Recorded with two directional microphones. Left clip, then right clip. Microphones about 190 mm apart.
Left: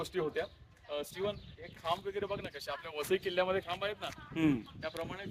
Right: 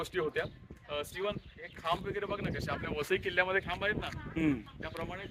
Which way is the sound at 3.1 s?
70° left (ahead or behind).